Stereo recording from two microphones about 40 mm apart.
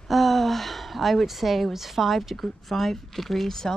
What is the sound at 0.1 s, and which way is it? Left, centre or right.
A woman's voice, centre.